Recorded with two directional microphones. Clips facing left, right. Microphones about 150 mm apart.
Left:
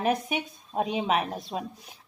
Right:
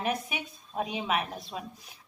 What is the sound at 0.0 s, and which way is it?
Speech, 45° left (ahead or behind).